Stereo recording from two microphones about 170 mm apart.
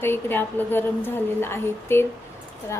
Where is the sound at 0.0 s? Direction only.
10° left (ahead or behind).